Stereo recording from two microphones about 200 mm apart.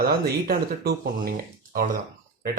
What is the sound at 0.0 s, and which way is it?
Speech, 50° right (ahead or behind).